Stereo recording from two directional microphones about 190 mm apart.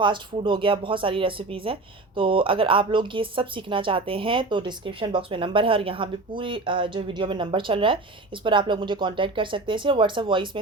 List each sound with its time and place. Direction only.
0.0 s speech: 25° right (ahead or behind)